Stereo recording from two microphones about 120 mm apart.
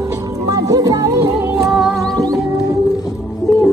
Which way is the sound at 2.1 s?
30° right (ahead or behind).